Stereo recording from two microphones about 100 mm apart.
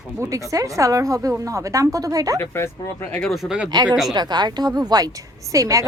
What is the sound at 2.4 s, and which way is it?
Speech, 25° left (ahead or behind).